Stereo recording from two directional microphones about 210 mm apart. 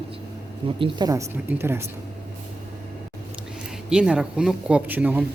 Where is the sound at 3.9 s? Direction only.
5° right (ahead or behind).